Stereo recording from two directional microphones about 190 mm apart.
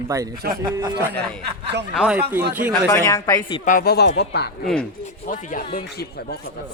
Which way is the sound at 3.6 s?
50° left (ahead or behind).